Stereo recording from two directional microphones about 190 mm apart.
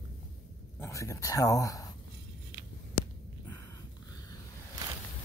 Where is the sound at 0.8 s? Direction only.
15° left (ahead or behind).